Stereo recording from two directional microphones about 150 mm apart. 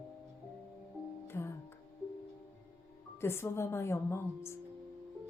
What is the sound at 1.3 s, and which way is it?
Music, 15° left (ahead or behind).